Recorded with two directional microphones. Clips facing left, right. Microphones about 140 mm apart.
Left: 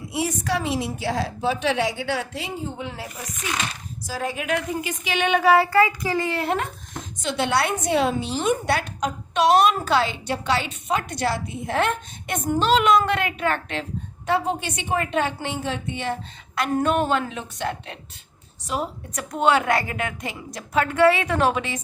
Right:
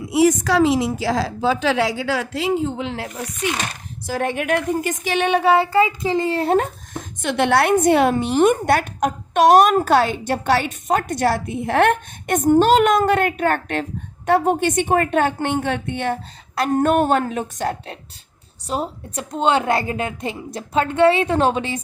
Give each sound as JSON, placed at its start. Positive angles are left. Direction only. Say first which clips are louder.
{"t": 0.1, "sound": "a woman's voice", "louder": "right 9 dB", "side_deg": -90}
{"t": 3.6, "sound": "speech", "louder": "right 2 dB", "side_deg": -55}
{"t": 7.2, "sound": "a woman's voice", "louder": "right 5 dB", "side_deg": -55}